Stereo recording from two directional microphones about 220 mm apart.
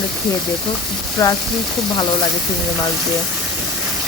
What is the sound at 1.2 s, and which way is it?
Speech, 15° left (ahead or behind).